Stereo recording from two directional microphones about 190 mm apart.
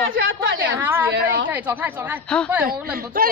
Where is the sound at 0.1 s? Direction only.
50° right (ahead or behind).